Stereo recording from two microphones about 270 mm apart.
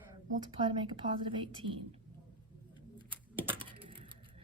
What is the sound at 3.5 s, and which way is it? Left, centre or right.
Typing, centre.